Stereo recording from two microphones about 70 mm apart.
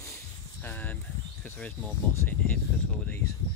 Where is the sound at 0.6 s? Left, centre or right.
Left.